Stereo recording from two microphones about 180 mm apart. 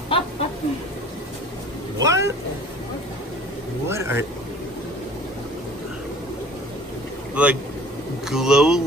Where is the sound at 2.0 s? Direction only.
15° right (ahead or behind).